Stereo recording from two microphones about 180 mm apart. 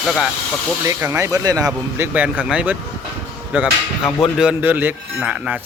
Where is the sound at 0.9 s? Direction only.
15° right (ahead or behind).